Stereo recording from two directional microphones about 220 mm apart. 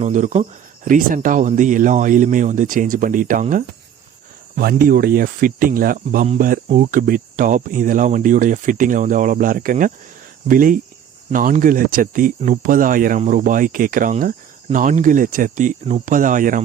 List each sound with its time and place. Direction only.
0.0 s speech: 35° right (ahead or behind)